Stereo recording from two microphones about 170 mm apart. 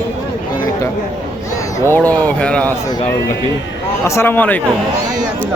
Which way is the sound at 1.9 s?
10° left (ahead or behind).